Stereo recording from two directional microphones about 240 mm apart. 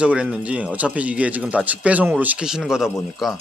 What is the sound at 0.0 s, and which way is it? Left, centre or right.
Speech, centre.